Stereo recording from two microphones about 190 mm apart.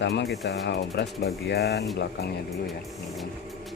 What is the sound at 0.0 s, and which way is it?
Speech, 65° left (ahead or behind).